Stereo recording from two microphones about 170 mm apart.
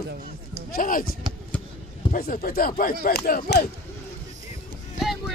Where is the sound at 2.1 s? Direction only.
60° left (ahead or behind).